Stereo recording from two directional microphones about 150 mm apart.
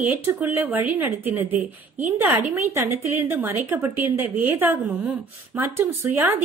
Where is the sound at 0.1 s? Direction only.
15° right (ahead or behind).